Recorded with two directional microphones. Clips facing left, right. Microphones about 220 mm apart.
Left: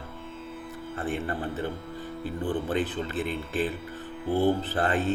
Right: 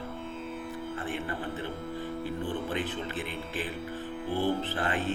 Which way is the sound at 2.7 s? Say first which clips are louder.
Left 5 dB; 35° left (ahead or behind).